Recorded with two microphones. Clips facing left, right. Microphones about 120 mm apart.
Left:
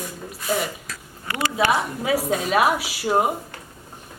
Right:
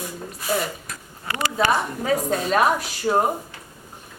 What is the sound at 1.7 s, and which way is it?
A woman's voice, 5° left (ahead or behind).